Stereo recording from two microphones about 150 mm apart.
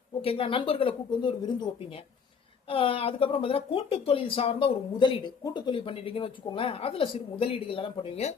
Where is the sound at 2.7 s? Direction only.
35° left (ahead or behind).